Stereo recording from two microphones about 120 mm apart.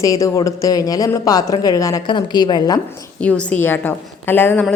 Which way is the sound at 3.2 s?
10° left (ahead or behind).